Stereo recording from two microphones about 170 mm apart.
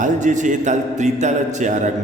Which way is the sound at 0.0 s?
45° right (ahead or behind).